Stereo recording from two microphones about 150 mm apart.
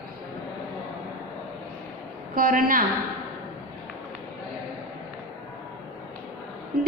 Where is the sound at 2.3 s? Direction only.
70° right (ahead or behind).